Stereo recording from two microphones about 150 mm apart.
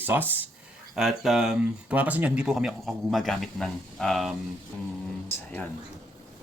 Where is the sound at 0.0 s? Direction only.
15° right (ahead or behind).